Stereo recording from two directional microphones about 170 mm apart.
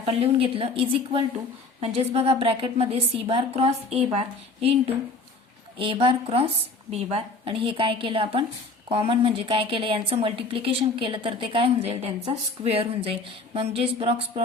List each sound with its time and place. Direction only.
0.0 s a woman's voice: 35° right (ahead or behind)